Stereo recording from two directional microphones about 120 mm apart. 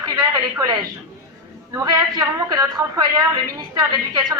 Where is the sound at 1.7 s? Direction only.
30° right (ahead or behind).